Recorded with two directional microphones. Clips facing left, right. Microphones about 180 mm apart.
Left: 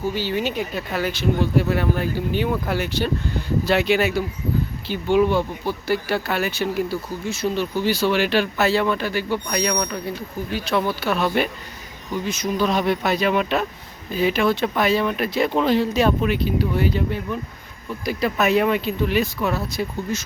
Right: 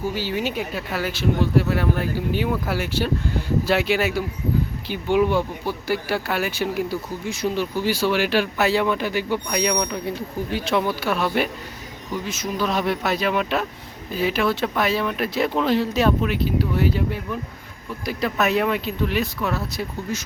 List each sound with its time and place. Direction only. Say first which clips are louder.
0.1 s speech: left 1 dB; 5° right (ahead or behind)
10.2 s speech: right 1 dB; 25° right (ahead or behind)
10.8 s speech: left 1 dB; 10° right (ahead or behind)